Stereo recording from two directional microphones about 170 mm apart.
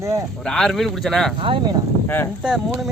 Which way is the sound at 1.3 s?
30° right (ahead or behind).